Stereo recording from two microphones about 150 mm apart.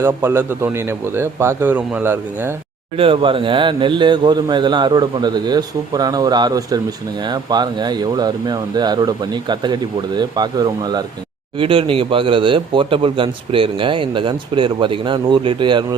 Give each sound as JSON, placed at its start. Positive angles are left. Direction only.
{"t": 0.0, "sound": "a man's voice", "side_deg": -15}
{"t": 3.0, "sound": "speech", "side_deg": -35}
{"t": 11.5, "sound": "a man's voice", "side_deg": -35}